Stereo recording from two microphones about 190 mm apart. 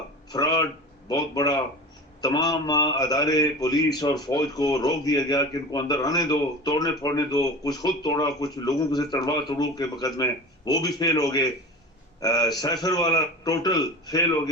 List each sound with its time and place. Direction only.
0.3 s a man's voice: 20° left (ahead or behind)